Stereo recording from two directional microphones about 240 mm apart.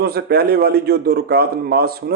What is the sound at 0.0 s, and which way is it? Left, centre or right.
A man's voice, right.